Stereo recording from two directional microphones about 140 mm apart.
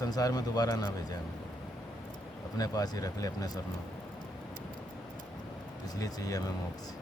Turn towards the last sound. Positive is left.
turn(degrees=25)  # may be behind; listen again after turning